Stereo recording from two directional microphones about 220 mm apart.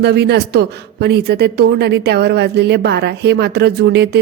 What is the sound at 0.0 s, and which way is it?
A woman's voice, 50° right (ahead or behind).